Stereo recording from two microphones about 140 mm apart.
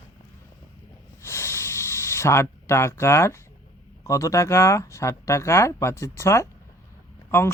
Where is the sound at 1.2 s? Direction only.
20° left (ahead or behind).